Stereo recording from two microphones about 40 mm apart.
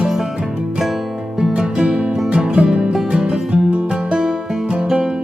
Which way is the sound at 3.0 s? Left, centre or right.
Right.